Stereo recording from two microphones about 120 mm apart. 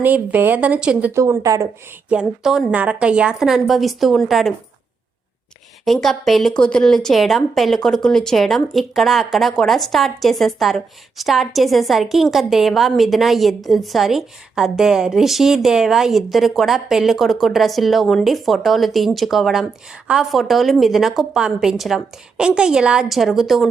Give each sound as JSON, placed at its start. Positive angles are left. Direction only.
{"t": 0.0, "sound": "speech", "side_deg": -15}
{"t": 1.1, "sound": "a woman's voice", "side_deg": -25}
{"t": 2.0, "sound": "speech", "side_deg": -5}
{"t": 5.8, "sound": "speech", "side_deg": 0}